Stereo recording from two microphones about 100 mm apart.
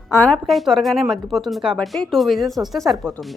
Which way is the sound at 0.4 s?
Centre (ahead or behind).